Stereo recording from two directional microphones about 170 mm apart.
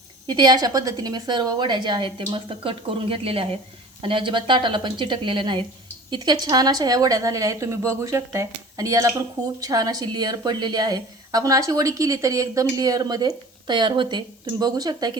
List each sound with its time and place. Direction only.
0.3 s a woman's voice: 25° right (ahead or behind)